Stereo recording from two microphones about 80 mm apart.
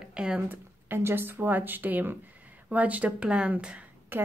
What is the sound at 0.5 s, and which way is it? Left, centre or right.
Speech, right.